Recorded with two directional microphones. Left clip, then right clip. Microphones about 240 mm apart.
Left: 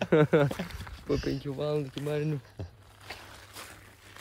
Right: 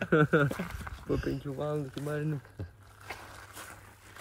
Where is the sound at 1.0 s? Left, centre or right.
Left.